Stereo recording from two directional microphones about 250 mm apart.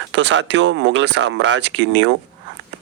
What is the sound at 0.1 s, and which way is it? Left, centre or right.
Speech, right.